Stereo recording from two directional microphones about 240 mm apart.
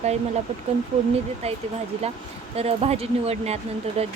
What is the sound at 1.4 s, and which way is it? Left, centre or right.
Speech, right.